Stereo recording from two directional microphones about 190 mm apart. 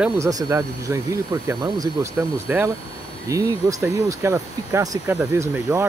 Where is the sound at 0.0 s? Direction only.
15° right (ahead or behind).